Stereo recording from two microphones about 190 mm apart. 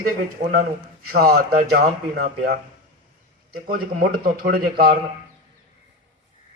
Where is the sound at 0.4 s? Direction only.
45° right (ahead or behind).